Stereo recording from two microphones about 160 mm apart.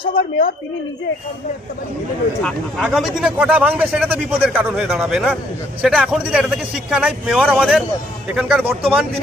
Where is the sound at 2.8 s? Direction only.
5° right (ahead or behind).